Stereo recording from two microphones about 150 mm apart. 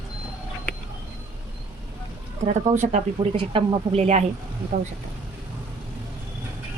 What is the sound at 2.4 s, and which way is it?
Speech, 55° right (ahead or behind).